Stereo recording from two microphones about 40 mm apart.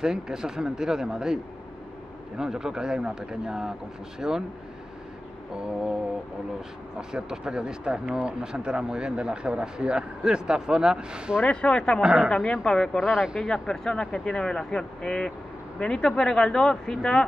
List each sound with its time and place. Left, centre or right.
0.0 s speech: centre
7.0 s speech: centre
11.6 s speech: left
12.0 s speech: right
12.6 s speech: centre
13.0 s speech: centre
13.4 s speech: centre